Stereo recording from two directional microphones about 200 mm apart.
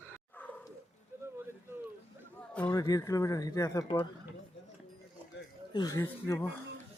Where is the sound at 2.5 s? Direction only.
5° left (ahead or behind).